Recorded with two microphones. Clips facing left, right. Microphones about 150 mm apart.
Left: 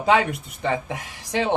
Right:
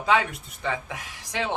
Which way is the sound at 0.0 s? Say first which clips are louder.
Left 4 dB; 25° left (ahead or behind).